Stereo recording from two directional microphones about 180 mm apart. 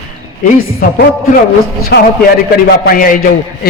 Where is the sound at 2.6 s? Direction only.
55° left (ahead or behind).